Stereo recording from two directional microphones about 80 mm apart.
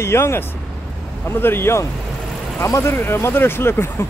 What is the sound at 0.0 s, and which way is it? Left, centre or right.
Speech, left.